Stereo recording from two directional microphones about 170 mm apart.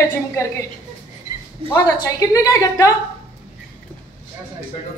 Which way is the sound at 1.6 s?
15° left (ahead or behind).